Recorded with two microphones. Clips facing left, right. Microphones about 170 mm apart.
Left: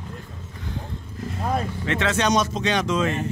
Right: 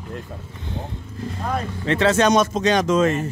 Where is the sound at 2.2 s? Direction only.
50° right (ahead or behind).